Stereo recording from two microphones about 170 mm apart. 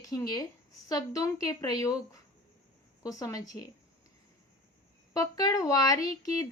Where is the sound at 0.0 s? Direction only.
20° left (ahead or behind).